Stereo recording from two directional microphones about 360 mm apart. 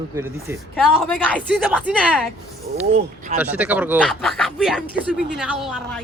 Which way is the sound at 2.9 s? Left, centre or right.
Centre.